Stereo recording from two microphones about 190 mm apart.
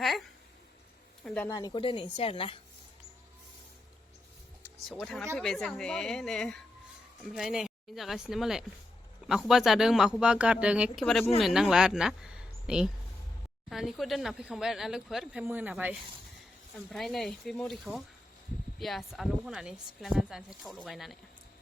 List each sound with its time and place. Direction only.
1.2 s a sound: 5° left (ahead or behind)
1.5 s speech: 20° left (ahead or behind)
5.0 s speech: 5° left (ahead or behind)